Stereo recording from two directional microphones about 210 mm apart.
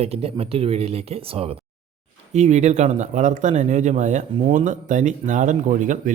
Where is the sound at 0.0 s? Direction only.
30° right (ahead or behind).